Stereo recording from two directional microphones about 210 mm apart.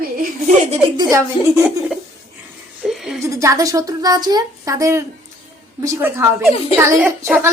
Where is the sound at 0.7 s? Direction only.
15° right (ahead or behind).